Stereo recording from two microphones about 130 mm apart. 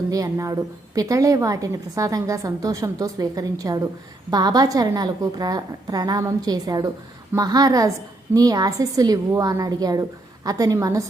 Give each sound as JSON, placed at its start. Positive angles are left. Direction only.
{"t": 0.1, "sound": "a woman's voice", "side_deg": -25}